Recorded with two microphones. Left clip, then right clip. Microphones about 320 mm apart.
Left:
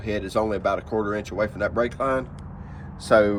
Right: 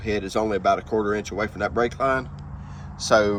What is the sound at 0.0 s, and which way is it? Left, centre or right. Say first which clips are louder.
Speech: even; centre.